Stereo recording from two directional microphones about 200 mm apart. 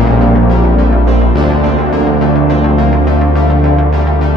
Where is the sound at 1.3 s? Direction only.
Centre (ahead or behind).